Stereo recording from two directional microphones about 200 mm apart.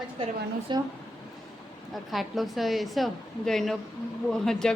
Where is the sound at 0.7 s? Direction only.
25° right (ahead or behind).